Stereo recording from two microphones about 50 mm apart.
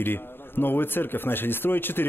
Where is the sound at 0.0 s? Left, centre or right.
Left.